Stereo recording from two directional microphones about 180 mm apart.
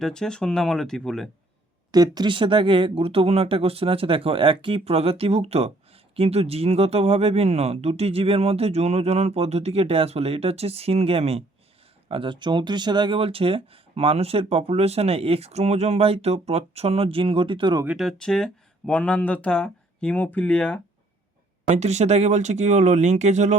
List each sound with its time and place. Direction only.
0.0 s speech: 5° left (ahead or behind)
1.9 s speech: 20° right (ahead or behind)
17.8 s speech: centre (ahead or behind)
21.7 s speech: 40° right (ahead or behind)